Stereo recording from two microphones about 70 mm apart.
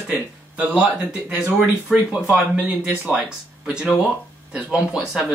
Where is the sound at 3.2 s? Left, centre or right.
Centre.